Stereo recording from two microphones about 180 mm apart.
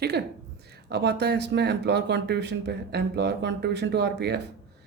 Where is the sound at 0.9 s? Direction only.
65° right (ahead or behind).